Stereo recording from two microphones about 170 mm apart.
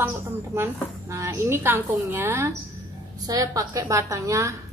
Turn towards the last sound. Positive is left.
turn(degrees=-20)  # may be behind; listen again after turning